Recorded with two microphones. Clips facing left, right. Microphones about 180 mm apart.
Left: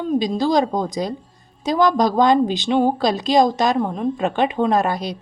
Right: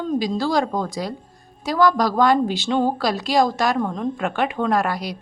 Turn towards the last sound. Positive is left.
turn(degrees=20)  # may be behind; listen again after turning